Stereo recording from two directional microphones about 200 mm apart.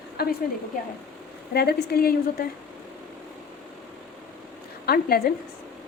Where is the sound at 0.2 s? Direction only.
50° left (ahead or behind).